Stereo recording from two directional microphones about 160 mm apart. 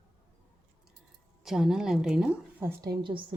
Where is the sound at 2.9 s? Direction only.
30° right (ahead or behind).